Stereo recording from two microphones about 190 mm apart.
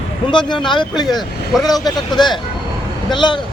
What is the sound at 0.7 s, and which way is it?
Speech, 25° left (ahead or behind).